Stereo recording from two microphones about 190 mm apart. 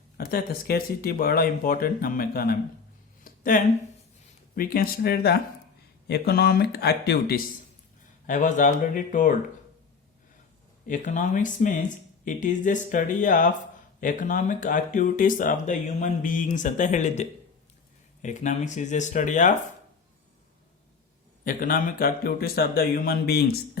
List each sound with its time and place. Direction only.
0.2 s speech: 50° left (ahead or behind)
3.2 s a sound: 45° left (ahead or behind)
4.5 s speech: 50° left (ahead or behind)
8.3 s speech: 40° left (ahead or behind)
10.8 s speech: 40° left (ahead or behind)
21.4 s speech: 45° left (ahead or behind)